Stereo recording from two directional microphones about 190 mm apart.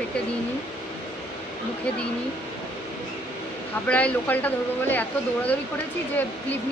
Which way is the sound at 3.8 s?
5° left (ahead or behind).